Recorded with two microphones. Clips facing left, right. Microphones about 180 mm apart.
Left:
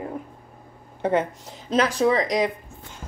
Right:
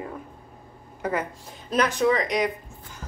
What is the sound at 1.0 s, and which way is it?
Speech, 25° left (ahead or behind).